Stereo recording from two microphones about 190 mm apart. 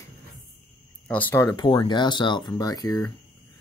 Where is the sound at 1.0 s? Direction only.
10° left (ahead or behind).